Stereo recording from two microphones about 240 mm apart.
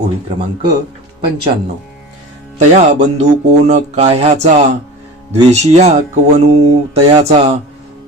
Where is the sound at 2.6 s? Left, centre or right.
Right.